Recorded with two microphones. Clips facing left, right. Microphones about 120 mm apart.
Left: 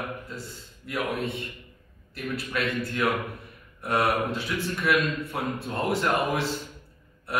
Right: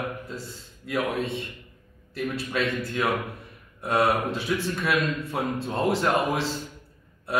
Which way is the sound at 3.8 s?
20° right (ahead or behind).